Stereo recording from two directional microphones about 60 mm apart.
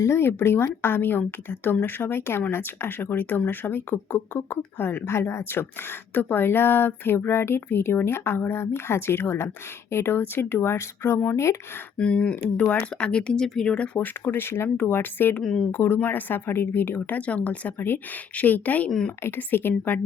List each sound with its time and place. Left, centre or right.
0.0 s speech: left
11.9 s speech: centre
14.0 s speech: left
18.9 s speech: centre
19.2 s speech: left